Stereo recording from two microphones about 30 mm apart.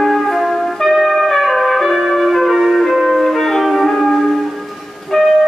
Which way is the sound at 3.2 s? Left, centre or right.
Centre.